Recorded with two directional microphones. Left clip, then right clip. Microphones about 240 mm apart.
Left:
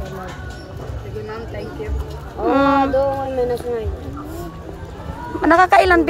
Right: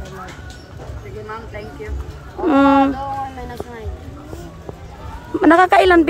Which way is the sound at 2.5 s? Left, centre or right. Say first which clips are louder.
Right 2 dB; right.